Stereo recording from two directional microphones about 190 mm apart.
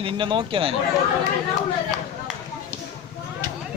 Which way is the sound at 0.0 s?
25° right (ahead or behind).